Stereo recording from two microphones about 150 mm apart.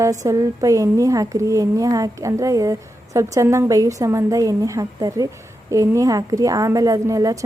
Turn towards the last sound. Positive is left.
turn(degrees=-20)  # may be behind; listen again after turning